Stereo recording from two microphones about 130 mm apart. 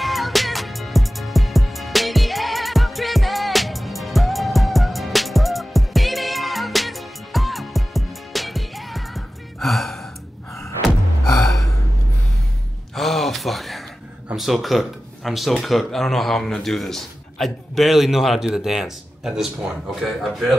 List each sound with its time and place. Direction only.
0.0 s music: centre (ahead or behind)
12.9 s a sound: centre (ahead or behind)
14.3 s speech: centre (ahead or behind)